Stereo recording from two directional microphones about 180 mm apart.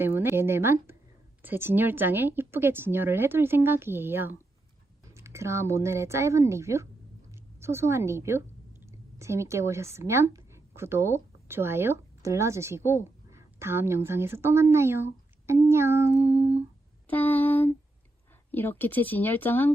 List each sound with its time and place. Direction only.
0.0 s a woman's voice: 10° right (ahead or behind)
17.1 s a sound: 10° left (ahead or behind)
18.5 s speech: 10° left (ahead or behind)